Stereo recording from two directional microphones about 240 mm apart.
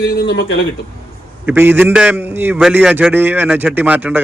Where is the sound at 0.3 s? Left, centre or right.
Left.